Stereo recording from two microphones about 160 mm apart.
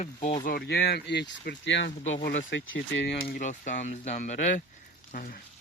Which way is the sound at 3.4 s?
50° left (ahead or behind).